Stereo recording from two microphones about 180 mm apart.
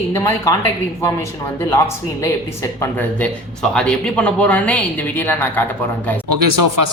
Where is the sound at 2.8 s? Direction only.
5° left (ahead or behind).